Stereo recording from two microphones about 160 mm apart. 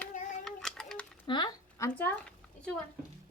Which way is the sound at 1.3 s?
25° left (ahead or behind).